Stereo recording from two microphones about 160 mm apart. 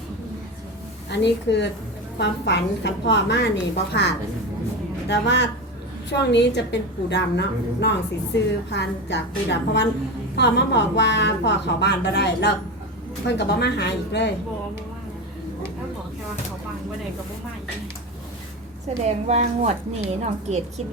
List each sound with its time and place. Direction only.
1.1 s a woman's voice: 90° left
19.0 s a woman's voice: 45° right (ahead or behind)